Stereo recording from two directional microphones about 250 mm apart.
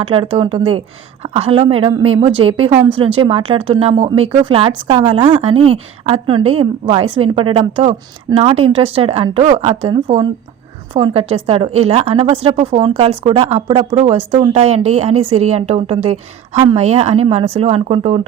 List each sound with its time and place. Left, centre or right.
0.0 s a woman's voice: right